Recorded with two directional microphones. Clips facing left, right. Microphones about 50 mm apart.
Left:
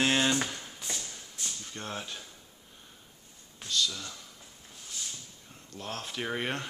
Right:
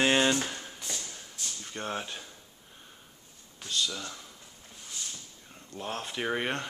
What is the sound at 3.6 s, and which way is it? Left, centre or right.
Speech, right.